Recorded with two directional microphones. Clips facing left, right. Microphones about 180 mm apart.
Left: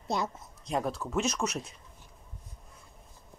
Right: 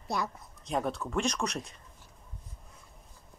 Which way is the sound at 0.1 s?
20° left (ahead or behind).